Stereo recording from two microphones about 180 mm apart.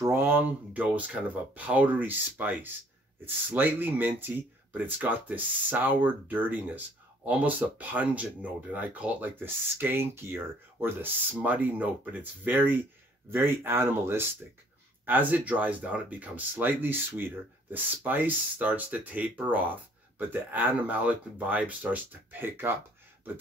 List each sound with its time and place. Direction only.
0.0 s speech: 15° right (ahead or behind)